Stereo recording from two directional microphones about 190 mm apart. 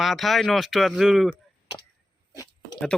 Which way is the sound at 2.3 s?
20° left (ahead or behind).